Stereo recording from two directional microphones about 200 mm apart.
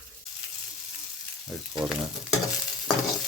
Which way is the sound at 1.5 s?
Centre (ahead or behind).